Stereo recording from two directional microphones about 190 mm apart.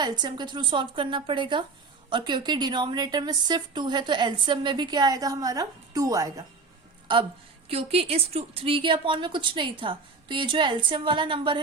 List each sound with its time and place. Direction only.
0.0 s a woman's voice: 25° right (ahead or behind)